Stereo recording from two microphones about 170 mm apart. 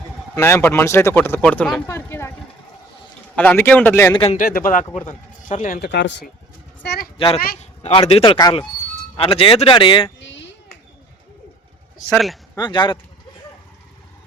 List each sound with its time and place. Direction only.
0.3 s speech: 15° left (ahead or behind)
1.9 s a sound: 15° left (ahead or behind)
3.3 s speech: 10° left (ahead or behind)
4.1 s speech: 35° left (ahead or behind)
4.4 s a man's voice: 55° left (ahead or behind)
5.8 s speech: 85° left
6.8 s a child's voice: 70° left (ahead or behind)
7.6 s speech: 40° left (ahead or behind)
10.2 s sheep: 90° left
12.0 s a man's voice: centre (ahead or behind)
12.5 s speech: 25° left (ahead or behind)